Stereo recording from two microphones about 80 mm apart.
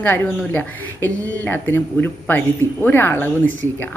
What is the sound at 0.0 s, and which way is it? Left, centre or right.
A woman's voice, left.